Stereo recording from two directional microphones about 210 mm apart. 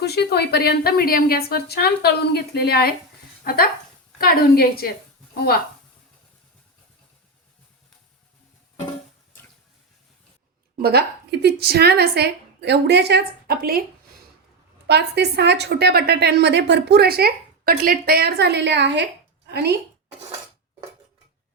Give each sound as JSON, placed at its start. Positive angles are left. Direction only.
{"t": 0.0, "sound": "a woman's voice", "side_deg": 50}
{"t": 10.8, "sound": "a woman's voice", "side_deg": -50}
{"t": 14.8, "sound": "a woman's voice", "side_deg": -55}